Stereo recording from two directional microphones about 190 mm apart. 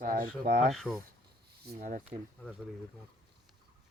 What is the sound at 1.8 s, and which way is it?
Speech, 45° right (ahead or behind).